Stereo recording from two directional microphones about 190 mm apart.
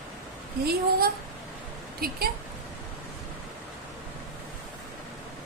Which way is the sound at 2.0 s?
55° right (ahead or behind).